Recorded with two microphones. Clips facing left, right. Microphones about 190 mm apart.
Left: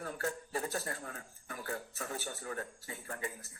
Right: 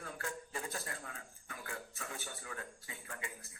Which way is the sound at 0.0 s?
40° left (ahead or behind).